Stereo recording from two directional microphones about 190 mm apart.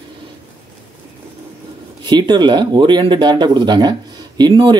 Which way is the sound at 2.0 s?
20° right (ahead or behind).